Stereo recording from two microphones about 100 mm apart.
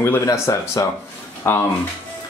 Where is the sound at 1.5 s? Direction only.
25° left (ahead or behind).